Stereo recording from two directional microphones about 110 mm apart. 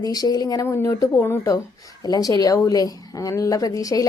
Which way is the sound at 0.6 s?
25° left (ahead or behind).